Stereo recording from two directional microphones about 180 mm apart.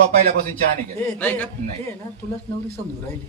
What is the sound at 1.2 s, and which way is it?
Speech, 10° left (ahead or behind).